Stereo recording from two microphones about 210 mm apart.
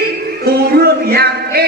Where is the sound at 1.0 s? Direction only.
45° right (ahead or behind).